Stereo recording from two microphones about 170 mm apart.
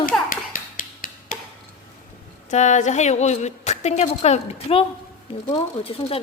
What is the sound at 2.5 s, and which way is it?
A woman's voice, 45° left (ahead or behind).